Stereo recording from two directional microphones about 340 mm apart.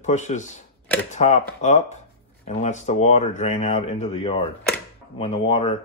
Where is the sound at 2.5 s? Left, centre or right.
Centre.